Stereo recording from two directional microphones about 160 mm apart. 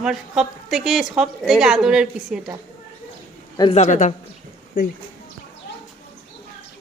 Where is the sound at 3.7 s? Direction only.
50° left (ahead or behind).